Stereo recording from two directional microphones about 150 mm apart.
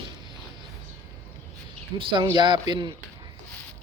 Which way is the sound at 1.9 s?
30° right (ahead or behind).